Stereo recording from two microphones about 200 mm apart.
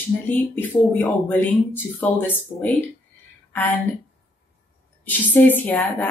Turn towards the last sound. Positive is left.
turn(degrees=10)  # may be behind; listen again after turning